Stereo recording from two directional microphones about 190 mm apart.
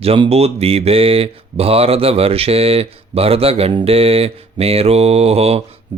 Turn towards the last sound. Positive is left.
turn(degrees=-30)  # may be behind; listen again after turning